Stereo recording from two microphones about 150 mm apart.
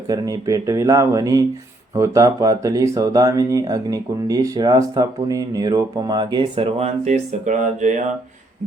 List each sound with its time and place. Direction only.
0.1 s speech: 20° right (ahead or behind); by 8.0 s 55° right (ahead or behind)